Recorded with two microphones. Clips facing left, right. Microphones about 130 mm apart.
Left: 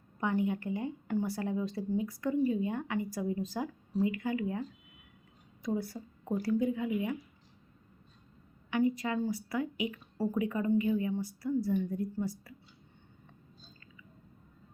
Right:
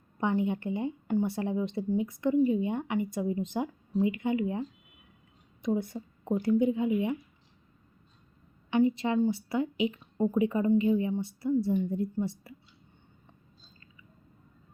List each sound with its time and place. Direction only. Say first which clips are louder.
0.2 s a woman's voice: right 3 dB; 20° right (ahead or behind)
5.6 s a woman's voice: right 4 dB; 20° right (ahead or behind)
8.7 s a woman's voice: right 4 dB; 25° right (ahead or behind)